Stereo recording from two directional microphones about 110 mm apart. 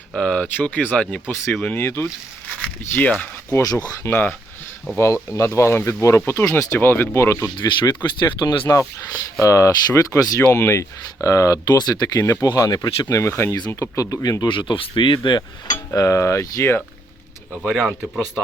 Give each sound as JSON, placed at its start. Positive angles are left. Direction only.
{"t": 0.2, "sound": "speech", "side_deg": 10}
{"t": 1.5, "sound": "speech", "side_deg": 0}
{"t": 1.7, "sound": "speech", "side_deg": 20}
{"t": 3.5, "sound": "speech", "side_deg": 35}
{"t": 4.1, "sound": "speech", "side_deg": 15}
{"t": 5.3, "sound": "speech", "side_deg": 30}
{"t": 7.5, "sound": "speech", "side_deg": 45}
{"t": 8.6, "sound": "speech", "side_deg": 25}
{"t": 12.2, "sound": "speech", "side_deg": 25}
{"t": 13.9, "sound": "speech", "side_deg": 30}
{"t": 14.4, "sound": "speech", "side_deg": 50}
{"t": 16.0, "sound": "speech", "side_deg": 25}